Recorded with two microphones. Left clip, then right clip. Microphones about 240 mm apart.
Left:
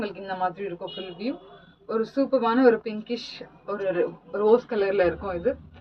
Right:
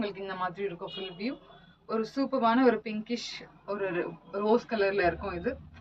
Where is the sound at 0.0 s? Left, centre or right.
Right.